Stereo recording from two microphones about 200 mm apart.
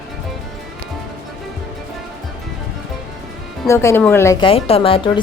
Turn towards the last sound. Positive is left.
turn(degrees=25)  # may be behind; listen again after turning